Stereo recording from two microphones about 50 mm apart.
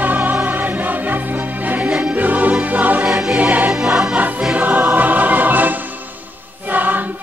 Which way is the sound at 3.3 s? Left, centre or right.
Right.